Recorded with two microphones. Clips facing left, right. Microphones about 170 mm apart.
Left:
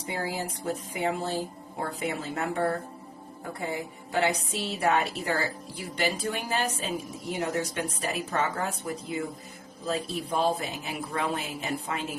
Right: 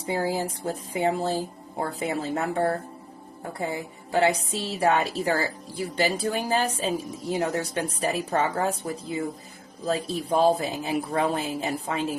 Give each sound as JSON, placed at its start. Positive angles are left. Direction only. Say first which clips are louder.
{"t": 0.0, "sound": "a woman's voice", "louder": "right 6 dB", "side_deg": -35}
{"t": 4.1, "sound": "a woman's voice", "louder": "right 4 dB", "side_deg": -35}